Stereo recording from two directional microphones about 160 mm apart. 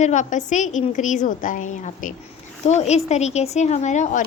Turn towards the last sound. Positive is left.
turn(degrees=50)  # may be behind; listen again after turning